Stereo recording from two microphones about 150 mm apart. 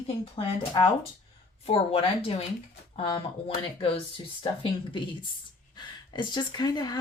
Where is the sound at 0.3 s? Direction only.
35° left (ahead or behind).